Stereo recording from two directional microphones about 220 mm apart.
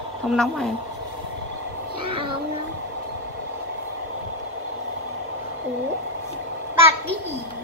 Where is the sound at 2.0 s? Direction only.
25° right (ahead or behind).